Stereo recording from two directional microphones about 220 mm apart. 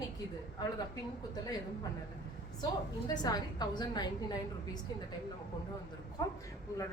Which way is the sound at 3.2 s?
20° left (ahead or behind).